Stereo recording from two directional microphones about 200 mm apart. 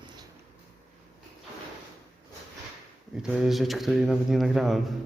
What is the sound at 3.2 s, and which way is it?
Speech, centre (ahead or behind).